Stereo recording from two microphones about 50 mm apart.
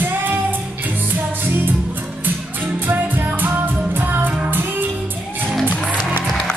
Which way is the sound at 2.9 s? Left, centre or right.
Right.